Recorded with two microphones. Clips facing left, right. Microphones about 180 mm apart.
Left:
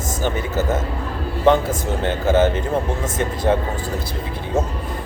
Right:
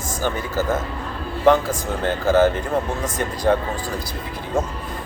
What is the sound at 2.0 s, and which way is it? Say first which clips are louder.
Speech: right 1 dB; 20° left (ahead or behind).